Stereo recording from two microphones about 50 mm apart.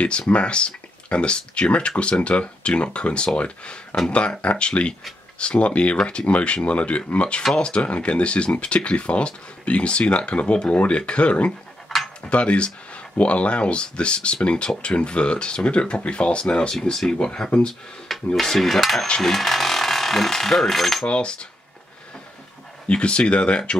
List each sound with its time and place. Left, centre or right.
0.3 s speech: left
16.9 s speech: centre
17.5 s speech: centre
18.0 s a sound: centre
19.2 s speech: centre
21.1 s speech: left
22.8 s speech: left